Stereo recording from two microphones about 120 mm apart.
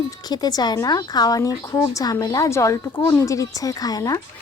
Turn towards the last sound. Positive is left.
turn(degrees=30)  # may be behind; listen again after turning